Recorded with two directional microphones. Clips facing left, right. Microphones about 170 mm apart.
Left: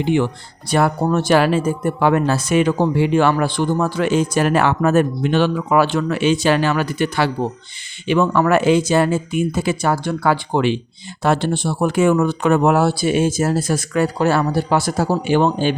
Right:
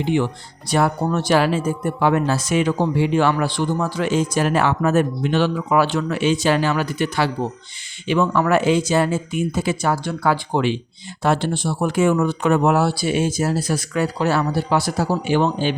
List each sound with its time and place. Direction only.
0.7 s speech: 55° left (ahead or behind)